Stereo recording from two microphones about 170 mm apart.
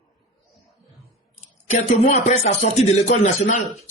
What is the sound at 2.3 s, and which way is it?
Speech, 45° left (ahead or behind).